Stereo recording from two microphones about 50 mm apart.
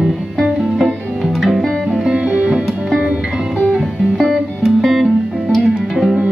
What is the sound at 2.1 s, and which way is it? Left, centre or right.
Music, right.